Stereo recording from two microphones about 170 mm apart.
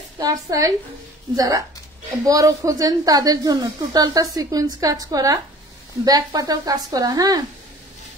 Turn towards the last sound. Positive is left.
turn(degrees=-20)  # may be behind; listen again after turning